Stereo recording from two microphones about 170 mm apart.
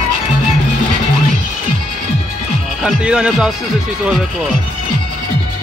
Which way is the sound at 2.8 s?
5° right (ahead or behind).